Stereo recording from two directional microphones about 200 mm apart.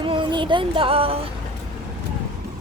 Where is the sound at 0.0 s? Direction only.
25° right (ahead or behind).